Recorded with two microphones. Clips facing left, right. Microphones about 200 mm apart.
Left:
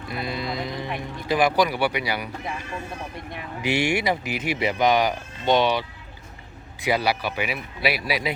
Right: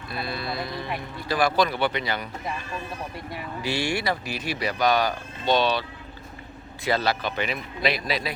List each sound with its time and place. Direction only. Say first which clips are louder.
0.1 s speech: left 2 dB; 15° left (ahead or behind)
3.6 s speech: left 4 dB; 20° left (ahead or behind)
6.8 s speech: left 1 dB; 10° left (ahead or behind)